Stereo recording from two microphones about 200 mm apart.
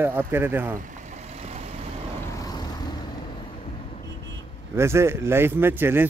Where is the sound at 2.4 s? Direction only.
20° left (ahead or behind).